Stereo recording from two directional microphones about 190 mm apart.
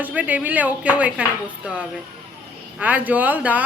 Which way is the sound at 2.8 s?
10° right (ahead or behind).